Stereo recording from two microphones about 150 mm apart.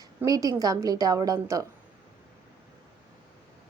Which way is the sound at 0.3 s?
20° right (ahead or behind).